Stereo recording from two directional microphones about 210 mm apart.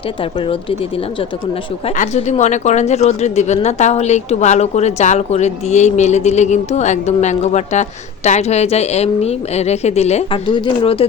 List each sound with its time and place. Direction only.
0.2 s speech: 25° left (ahead or behind)
2.0 s a woman's voice: 30° left (ahead or behind)